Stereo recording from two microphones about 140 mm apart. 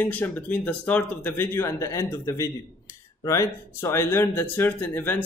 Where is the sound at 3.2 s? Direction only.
20° left (ahead or behind).